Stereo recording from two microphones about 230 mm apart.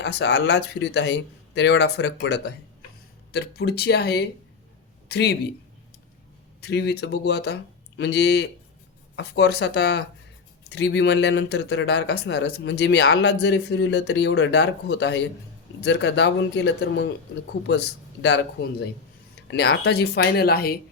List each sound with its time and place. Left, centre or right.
0.0 s a man's voice: left
6.6 s speech: left